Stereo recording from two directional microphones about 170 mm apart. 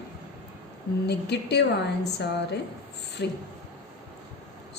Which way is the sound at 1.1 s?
80° left.